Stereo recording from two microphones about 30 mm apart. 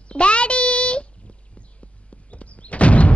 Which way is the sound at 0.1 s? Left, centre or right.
Left.